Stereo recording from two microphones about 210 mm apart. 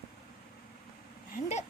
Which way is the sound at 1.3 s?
35° left (ahead or behind).